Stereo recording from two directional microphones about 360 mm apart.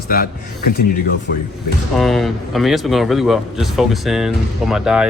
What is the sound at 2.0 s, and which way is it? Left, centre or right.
A man's voice, centre.